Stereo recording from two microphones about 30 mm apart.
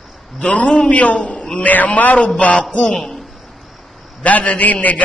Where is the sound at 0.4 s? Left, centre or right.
Left.